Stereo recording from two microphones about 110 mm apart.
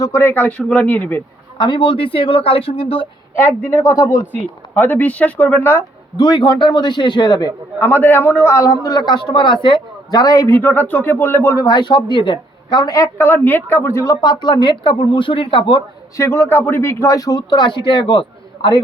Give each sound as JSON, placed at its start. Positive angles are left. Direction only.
{"t": 0.0, "sound": "speech", "side_deg": 25}
{"t": 1.5, "sound": "speech", "side_deg": 45}
{"t": 3.3, "sound": "a man's voice", "side_deg": 20}
{"t": 4.3, "sound": "speech", "side_deg": 15}
{"t": 6.1, "sound": "speech", "side_deg": 40}
{"t": 7.8, "sound": "a man's voice", "side_deg": 20}
{"t": 11.7, "sound": "speech", "side_deg": 45}
{"t": 13.1, "sound": "speech", "side_deg": 20}
{"t": 16.1, "sound": "speech", "side_deg": 25}